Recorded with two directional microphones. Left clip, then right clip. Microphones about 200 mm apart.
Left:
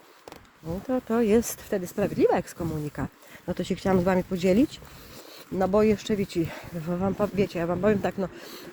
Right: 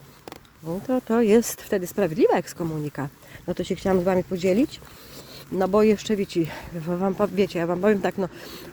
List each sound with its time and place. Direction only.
0.7 s speech: 20° right (ahead or behind)
2.1 s speech: 10° right (ahead or behind)
3.4 s speech: 5° right (ahead or behind)
5.5 s speech: 15° right (ahead or behind)